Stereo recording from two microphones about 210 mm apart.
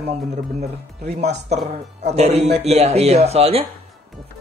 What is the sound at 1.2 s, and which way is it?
A man's voice, 30° right (ahead or behind).